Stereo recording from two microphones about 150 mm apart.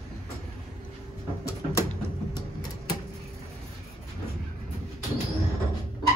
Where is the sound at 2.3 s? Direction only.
25° left (ahead or behind).